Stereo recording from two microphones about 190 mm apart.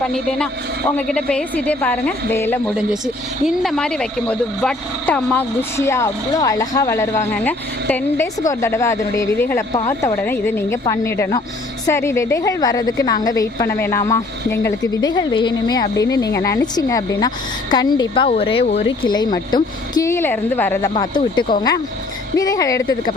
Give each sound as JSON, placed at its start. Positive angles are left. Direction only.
{"t": 0.1, "sound": "a man's voice", "side_deg": 5}
{"t": 20.9, "sound": "speech", "side_deg": 25}